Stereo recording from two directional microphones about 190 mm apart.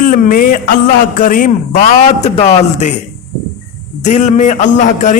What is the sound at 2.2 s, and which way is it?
Speech, 35° left (ahead or behind).